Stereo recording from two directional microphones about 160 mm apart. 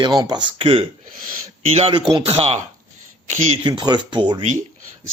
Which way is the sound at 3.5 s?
30° right (ahead or behind).